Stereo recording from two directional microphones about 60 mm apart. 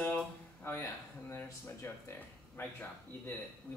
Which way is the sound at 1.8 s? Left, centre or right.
Left.